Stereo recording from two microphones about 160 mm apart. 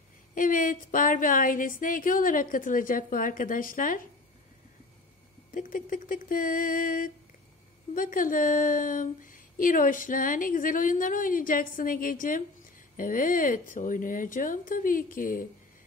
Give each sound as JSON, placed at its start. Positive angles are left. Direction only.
{"t": 0.3, "sound": "speech", "side_deg": 55}
{"t": 5.5, "sound": "speech", "side_deg": 60}